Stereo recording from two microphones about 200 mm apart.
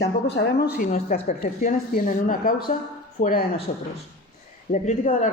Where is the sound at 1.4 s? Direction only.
45° left (ahead or behind).